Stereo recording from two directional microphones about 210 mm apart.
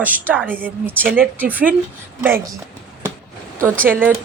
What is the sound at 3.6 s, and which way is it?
Speech, 10° right (ahead or behind).